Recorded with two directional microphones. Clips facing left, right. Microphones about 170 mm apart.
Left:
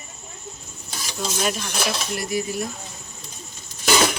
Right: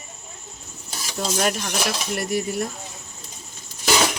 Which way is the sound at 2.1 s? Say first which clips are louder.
Right 2 dB; 60° right (ahead or behind).